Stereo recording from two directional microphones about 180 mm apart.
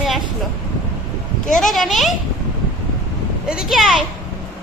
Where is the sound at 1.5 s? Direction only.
Centre (ahead or behind).